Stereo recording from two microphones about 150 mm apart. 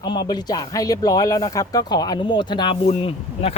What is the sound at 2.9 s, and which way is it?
Speech, 40° left (ahead or behind).